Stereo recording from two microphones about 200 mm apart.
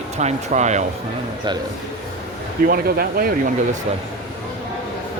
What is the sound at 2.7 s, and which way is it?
Speech, 50° right (ahead or behind).